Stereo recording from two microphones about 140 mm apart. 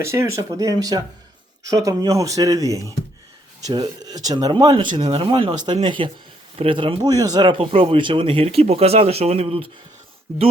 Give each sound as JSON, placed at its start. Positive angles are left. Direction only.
{"t": 0.0, "sound": "speech", "side_deg": -20}